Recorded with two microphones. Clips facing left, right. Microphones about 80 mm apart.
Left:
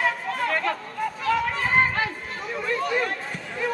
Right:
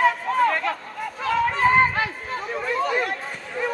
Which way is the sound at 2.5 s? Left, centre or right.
Right.